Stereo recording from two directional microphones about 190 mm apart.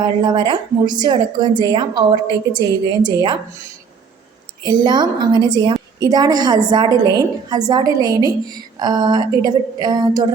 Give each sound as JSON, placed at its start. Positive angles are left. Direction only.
{"t": 0.0, "sound": "a woman's voice", "side_deg": -25}
{"t": 4.6, "sound": "a woman's voice", "side_deg": -25}